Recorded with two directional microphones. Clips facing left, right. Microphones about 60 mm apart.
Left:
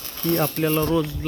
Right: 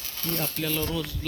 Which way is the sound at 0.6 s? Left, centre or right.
Left.